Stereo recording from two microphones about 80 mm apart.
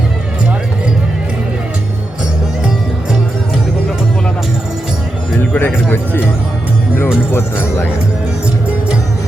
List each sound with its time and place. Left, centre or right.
5.4 s music: left
7.3 s speech: left